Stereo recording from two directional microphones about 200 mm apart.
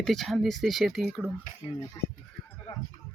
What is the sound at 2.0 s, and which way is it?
Speech, 20° left (ahead or behind).